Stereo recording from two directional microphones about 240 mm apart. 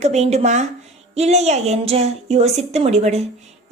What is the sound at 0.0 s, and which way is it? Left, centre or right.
A woman's voice, right.